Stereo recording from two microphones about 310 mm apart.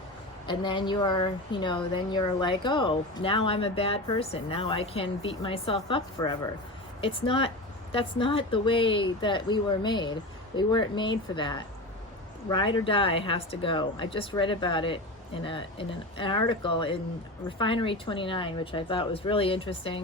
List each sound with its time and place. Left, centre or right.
0.4 s a woman's voice: centre